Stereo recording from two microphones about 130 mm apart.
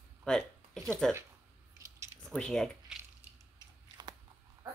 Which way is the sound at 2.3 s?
5° left (ahead or behind).